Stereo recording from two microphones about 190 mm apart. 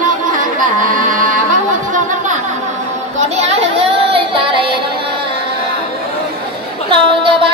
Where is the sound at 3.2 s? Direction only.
35° right (ahead or behind).